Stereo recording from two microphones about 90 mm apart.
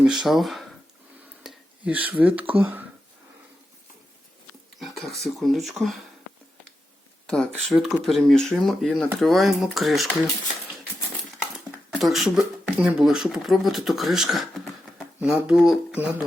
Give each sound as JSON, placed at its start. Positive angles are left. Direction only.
{"t": 0.0, "sound": "speech", "side_deg": -5}
{"t": 1.8, "sound": "speech", "side_deg": -15}
{"t": 4.8, "sound": "speech", "side_deg": 0}
{"t": 7.3, "sound": "speech", "side_deg": 5}
{"t": 11.9, "sound": "speech", "side_deg": 0}
{"t": 16.0, "sound": "speech", "side_deg": -15}